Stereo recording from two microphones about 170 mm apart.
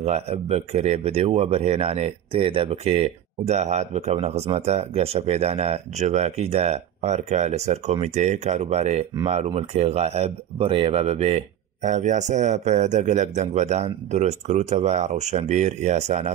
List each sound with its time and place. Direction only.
0.0 s speech: 40° right (ahead or behind)